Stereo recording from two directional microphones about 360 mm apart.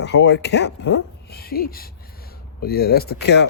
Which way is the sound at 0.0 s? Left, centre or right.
Left.